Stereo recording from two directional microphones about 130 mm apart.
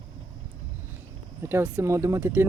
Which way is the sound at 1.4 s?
15° right (ahead or behind).